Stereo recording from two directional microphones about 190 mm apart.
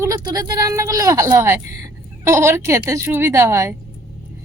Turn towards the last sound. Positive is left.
turn(degrees=-15)  # may be behind; listen again after turning